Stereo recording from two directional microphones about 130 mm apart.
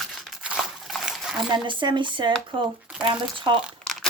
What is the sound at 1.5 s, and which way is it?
Speech, 35° right (ahead or behind).